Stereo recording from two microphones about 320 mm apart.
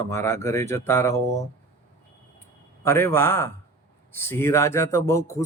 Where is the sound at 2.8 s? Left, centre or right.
Centre.